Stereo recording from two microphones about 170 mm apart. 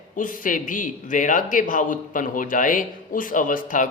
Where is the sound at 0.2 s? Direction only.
55° left (ahead or behind).